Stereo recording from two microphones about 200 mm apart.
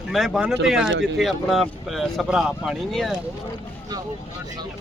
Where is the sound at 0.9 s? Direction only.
65° right (ahead or behind).